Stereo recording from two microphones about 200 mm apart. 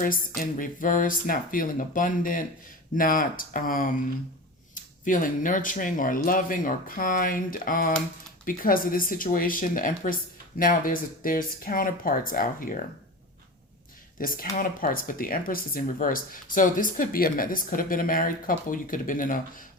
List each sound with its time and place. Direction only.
0.0 s speech: 45° left (ahead or behind)
14.2 s speech: 45° left (ahead or behind)